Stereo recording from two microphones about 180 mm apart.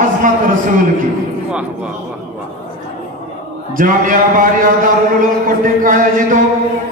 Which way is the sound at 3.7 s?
50° right (ahead or behind).